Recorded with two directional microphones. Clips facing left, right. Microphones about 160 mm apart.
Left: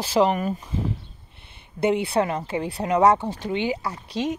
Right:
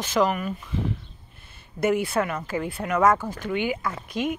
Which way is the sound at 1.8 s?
30° left (ahead or behind).